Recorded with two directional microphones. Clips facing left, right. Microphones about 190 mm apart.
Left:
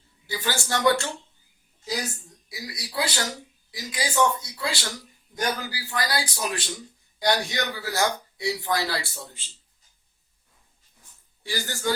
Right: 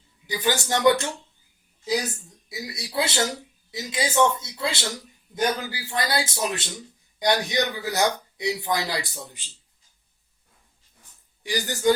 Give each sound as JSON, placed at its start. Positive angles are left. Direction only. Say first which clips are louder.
{"t": 0.3, "sound": "a man's voice", "louder": "right 4 dB", "side_deg": -15}
{"t": 2.5, "sound": "a man's voice", "louder": "right 3 dB", "side_deg": -25}
{"t": 11.4, "sound": "speech", "louder": "right 6 dB", "side_deg": -15}